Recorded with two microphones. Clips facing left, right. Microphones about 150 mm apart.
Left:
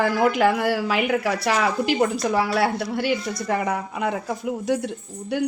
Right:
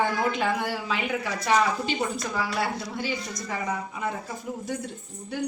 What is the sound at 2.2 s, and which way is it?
A woman's voice, 70° left (ahead or behind).